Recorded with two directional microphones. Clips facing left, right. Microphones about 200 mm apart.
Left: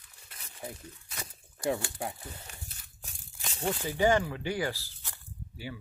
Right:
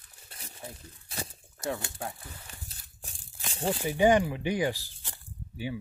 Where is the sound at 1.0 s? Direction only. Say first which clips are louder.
Right 9 dB; 30° right (ahead or behind).